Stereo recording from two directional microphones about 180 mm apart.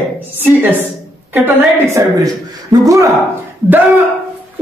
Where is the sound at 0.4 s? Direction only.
10° right (ahead or behind).